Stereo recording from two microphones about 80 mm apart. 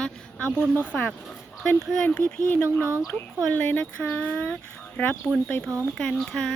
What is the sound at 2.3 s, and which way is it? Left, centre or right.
Speech, left.